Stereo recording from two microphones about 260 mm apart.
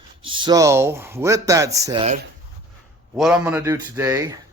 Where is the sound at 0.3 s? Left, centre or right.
Centre.